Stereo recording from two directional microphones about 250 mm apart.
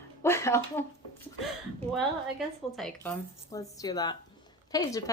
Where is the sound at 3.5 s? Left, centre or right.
Centre.